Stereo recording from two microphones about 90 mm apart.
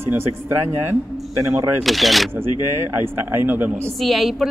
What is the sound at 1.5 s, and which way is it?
Speech, 30° right (ahead or behind).